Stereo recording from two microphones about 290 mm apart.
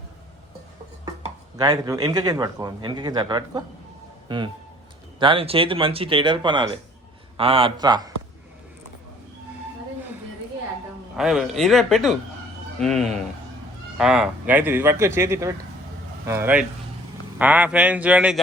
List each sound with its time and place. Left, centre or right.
1.5 s a man's voice: centre
5.2 s a man's voice: centre
11.2 s a man's voice: centre